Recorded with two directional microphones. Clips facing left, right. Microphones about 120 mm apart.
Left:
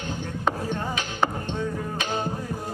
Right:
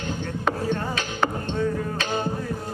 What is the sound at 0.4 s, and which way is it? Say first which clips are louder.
Music: right 2 dB; 15° left (ahead or behind).